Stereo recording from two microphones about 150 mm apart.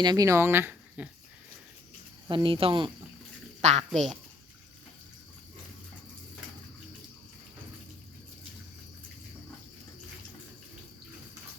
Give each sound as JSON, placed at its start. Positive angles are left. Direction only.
{"t": 0.0, "sound": "speech", "side_deg": -25}
{"t": 2.3, "sound": "speech", "side_deg": -35}
{"t": 3.6, "sound": "speech", "side_deg": -50}
{"t": 3.9, "sound": "speech", "side_deg": 0}